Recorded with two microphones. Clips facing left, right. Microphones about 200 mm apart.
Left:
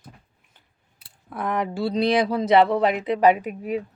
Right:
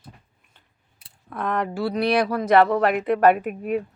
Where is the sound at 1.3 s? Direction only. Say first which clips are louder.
Even; 15° left (ahead or behind).